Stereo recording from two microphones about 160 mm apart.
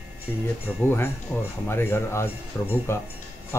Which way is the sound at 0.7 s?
10° left (ahead or behind).